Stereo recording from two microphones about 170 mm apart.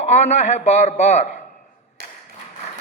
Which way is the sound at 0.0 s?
40° left (ahead or behind).